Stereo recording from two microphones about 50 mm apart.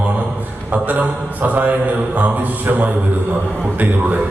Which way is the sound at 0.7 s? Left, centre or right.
Right.